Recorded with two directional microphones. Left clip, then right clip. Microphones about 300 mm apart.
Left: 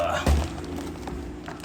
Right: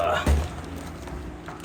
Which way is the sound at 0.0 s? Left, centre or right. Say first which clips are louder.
Right 2 dB; centre.